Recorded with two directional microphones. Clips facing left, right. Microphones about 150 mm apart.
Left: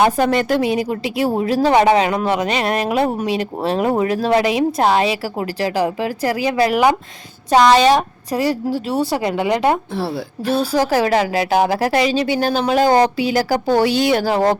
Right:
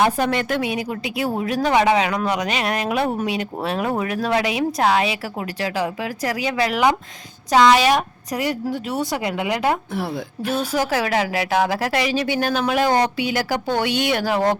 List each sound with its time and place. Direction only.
0.4 s a woman's voice: 30° left (ahead or behind)
7.9 s a woman's voice: 30° left (ahead or behind)